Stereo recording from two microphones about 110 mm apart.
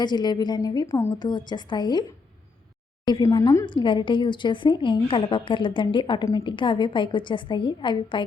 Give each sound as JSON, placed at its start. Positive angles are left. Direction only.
{"t": 0.0, "sound": "a woman's voice", "side_deg": 40}
{"t": 3.2, "sound": "a woman's voice", "side_deg": 30}
{"t": 3.7, "sound": "a woman's voice", "side_deg": 50}